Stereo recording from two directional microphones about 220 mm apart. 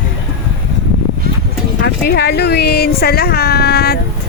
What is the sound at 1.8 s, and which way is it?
Speech, 45° left (ahead or behind).